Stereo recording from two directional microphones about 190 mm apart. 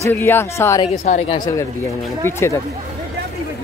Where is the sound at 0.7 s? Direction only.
35° left (ahead or behind).